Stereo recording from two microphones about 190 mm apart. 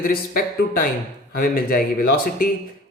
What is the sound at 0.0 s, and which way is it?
A man's voice, 50° left (ahead or behind).